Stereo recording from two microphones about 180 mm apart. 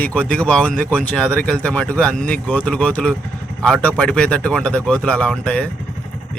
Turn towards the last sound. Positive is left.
turn(degrees=5)  # may be behind; listen again after turning